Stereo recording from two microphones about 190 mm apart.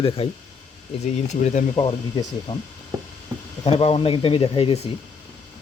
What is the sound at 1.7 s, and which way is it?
Speech, 25° left (ahead or behind).